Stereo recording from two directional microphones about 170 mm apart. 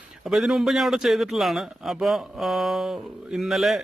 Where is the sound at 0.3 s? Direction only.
Centre (ahead or behind).